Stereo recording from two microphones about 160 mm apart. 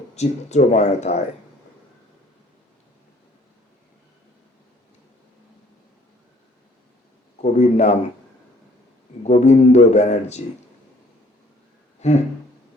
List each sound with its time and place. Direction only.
0.2 s a man's voice: 45° left (ahead or behind)
7.4 s a man's voice: 45° left (ahead or behind)
9.2 s a man's voice: 45° left (ahead or behind)
11.9 s a sound: 45° left (ahead or behind)